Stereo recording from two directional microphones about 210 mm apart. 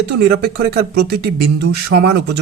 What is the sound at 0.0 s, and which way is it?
Speech, 50° right (ahead or behind).